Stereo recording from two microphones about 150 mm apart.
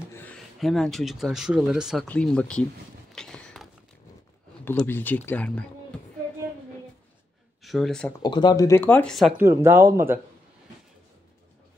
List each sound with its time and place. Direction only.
0.1 s a sound: 10° left (ahead or behind)
0.6 s speech: centre (ahead or behind)
2.0 s speech: 5° left (ahead or behind)
3.2 s a sound: 5° left (ahead or behind)
4.6 s speech: 15° left (ahead or behind)
7.6 s speech: centre (ahead or behind)
8.2 s speech: 30° left (ahead or behind); by 9.3 s 5° left (ahead or behind)
9.4 s speech: 15° right (ahead or behind)